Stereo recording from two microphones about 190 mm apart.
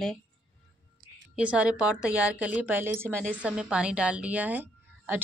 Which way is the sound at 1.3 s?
5° right (ahead or behind).